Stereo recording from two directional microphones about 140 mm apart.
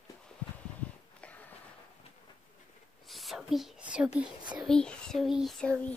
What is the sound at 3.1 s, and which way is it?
Whispering, centre (ahead or behind).